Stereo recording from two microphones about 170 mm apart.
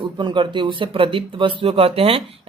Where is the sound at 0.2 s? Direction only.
30° right (ahead or behind).